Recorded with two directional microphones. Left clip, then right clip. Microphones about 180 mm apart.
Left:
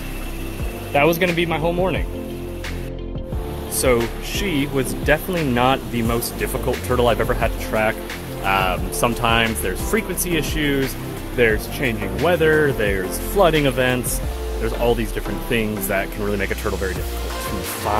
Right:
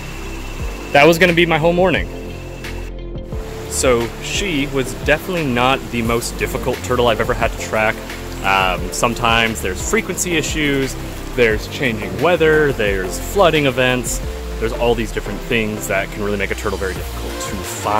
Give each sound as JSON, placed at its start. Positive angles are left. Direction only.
{"t": 0.9, "sound": "speech", "side_deg": -40}
{"t": 3.7, "sound": "speech", "side_deg": -5}
{"t": 15.5, "sound": "speech", "side_deg": -10}